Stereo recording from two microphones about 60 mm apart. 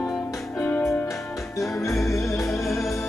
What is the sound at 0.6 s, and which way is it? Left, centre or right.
Music, left.